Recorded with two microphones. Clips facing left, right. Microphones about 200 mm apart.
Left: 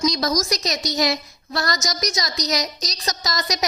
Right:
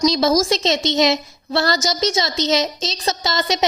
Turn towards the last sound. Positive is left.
turn(degrees=-30)  # may be behind; listen again after turning